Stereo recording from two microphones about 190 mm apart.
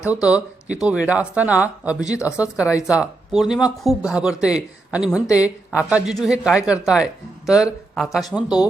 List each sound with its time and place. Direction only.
0.1 s speech: 5° right (ahead or behind)